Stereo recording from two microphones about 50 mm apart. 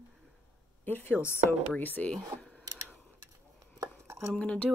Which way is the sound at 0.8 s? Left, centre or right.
Left.